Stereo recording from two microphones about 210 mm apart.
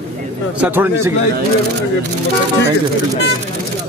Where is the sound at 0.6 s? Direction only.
10° right (ahead or behind).